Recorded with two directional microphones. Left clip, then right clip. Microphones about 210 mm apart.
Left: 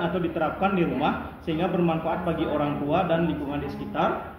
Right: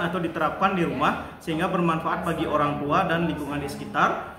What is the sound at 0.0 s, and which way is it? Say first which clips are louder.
A man's voice: right 1 dB; 20° right (ahead or behind).